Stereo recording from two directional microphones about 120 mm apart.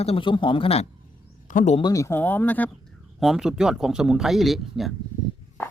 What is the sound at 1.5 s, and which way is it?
Speech, 90° left.